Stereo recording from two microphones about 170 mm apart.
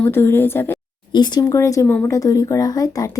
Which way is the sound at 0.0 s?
15° left (ahead or behind).